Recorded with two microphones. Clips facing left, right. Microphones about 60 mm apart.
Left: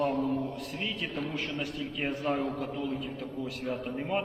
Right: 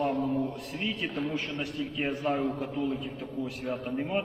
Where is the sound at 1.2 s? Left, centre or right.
Centre.